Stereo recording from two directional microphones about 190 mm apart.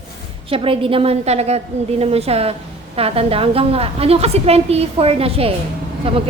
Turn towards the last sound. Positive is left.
turn(degrees=-30)  # may be behind; listen again after turning